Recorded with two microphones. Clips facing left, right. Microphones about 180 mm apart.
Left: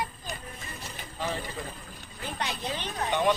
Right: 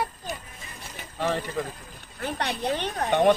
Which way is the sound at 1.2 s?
65° right (ahead or behind).